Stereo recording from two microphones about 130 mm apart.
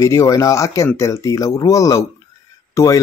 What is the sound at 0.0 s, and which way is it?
Speech, 25° left (ahead or behind).